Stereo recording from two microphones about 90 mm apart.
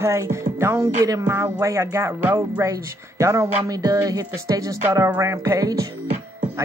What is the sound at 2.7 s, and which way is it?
Speech, 35° right (ahead or behind).